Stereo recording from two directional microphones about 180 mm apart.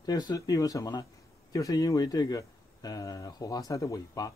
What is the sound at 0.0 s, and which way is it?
Speech, 20° left (ahead or behind).